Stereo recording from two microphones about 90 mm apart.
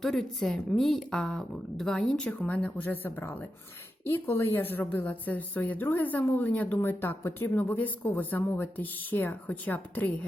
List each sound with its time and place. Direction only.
0.0 s speech: 5° left (ahead or behind)